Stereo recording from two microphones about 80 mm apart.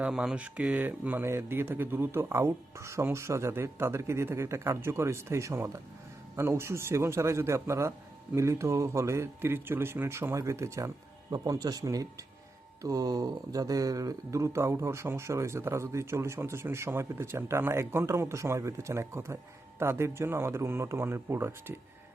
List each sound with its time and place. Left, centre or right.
0.0 s speech: centre; by 10.9 s right
11.3 s speech: right